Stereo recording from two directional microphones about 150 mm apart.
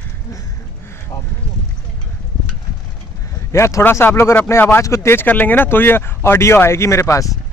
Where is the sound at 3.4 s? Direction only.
20° left (ahead or behind).